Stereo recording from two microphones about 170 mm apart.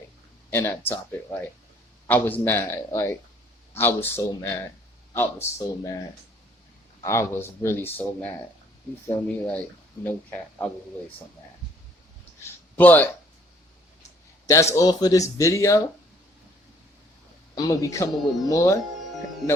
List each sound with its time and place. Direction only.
0.5 s speech: 10° left (ahead or behind)
12.7 s speech: 10° left (ahead or behind)
14.4 s speech: 15° left (ahead or behind)
17.5 s speech: 20° left (ahead or behind)